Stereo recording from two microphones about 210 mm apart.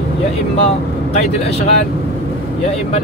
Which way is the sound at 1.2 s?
30° left (ahead or behind).